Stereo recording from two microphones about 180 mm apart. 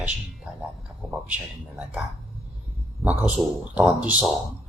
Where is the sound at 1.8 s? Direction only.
5° right (ahead or behind).